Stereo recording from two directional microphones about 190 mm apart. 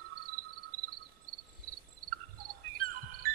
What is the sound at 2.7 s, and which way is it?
Music, 50° right (ahead or behind).